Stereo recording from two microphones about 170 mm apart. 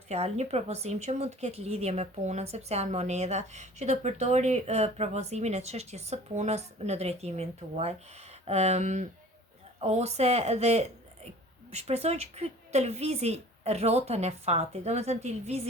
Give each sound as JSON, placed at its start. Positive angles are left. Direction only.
{"t": 0.1, "sound": "speech", "side_deg": -40}